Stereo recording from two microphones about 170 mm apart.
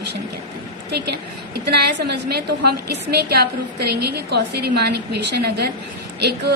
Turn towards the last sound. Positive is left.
turn(degrees=-75)  # may be behind; listen again after turning